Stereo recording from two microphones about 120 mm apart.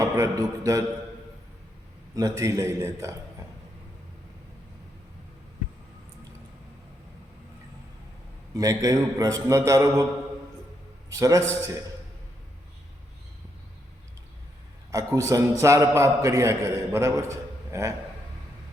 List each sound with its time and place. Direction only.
0.0 s a man's voice: 25° right (ahead or behind)
2.1 s a man's voice: 30° right (ahead or behind)
8.5 s a man's voice: 30° right (ahead or behind)
11.1 s a man's voice: 25° right (ahead or behind)
14.8 s a man's voice: 30° right (ahead or behind)